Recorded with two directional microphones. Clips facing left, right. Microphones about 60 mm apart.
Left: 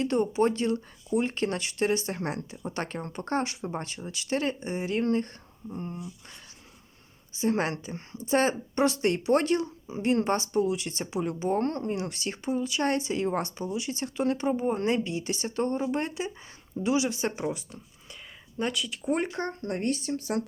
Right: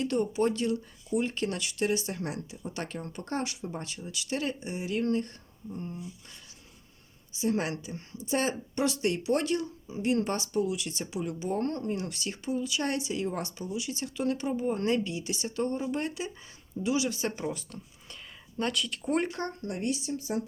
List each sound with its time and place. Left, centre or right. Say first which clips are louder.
0.0 s speech: left 3 dB; left
7.3 s speech: left 2 dB; left; by 19.3 s centre
19.3 s speech: left 3 dB; left